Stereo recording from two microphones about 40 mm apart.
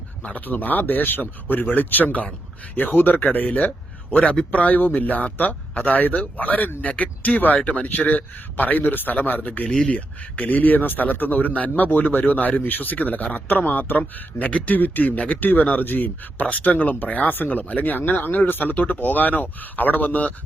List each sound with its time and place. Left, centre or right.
0.2 s a man's voice: left
3.2 s a man's voice: left
4.1 s a man's voice: left
9.6 s speech: left
9.9 s a man's voice: left